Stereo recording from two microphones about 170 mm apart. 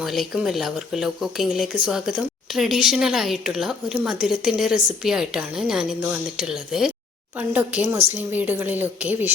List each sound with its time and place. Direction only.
0.0 s speech: centre (ahead or behind)